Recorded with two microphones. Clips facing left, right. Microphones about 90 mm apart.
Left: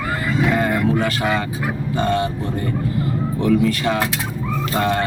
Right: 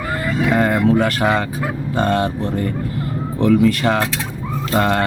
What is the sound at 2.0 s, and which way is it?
Speech, 50° right (ahead or behind).